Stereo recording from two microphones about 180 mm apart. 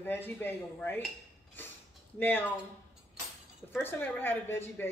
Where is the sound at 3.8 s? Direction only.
10° left (ahead or behind).